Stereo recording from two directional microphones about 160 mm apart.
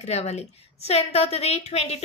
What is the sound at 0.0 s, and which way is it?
A woman's voice, 40° left (ahead or behind).